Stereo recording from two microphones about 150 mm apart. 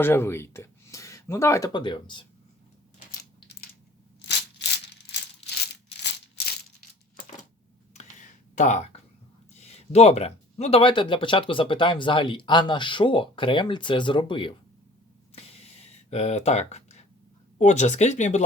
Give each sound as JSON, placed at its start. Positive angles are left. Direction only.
{"t": 0.0, "sound": "speech", "side_deg": 15}
{"t": 1.7, "sound": "speech", "side_deg": 30}
{"t": 8.5, "sound": "speech", "side_deg": 55}
{"t": 15.4, "sound": "a sound", "side_deg": 40}
{"t": 17.6, "sound": "speech", "side_deg": 50}